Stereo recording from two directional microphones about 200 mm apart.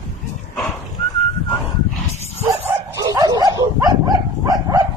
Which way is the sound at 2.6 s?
15° right (ahead or behind).